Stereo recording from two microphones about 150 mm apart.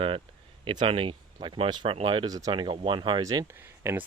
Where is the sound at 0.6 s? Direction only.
35° right (ahead or behind).